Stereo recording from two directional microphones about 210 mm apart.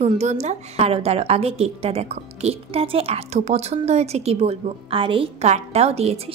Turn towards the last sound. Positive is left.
turn(degrees=-30)  # may be behind; listen again after turning